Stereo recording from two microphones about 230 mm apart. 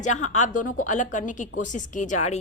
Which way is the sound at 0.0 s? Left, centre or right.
Left.